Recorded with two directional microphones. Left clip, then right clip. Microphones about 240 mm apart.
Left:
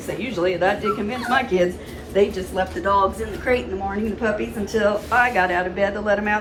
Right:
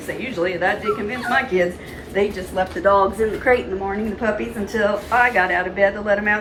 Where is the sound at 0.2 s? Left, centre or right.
Centre.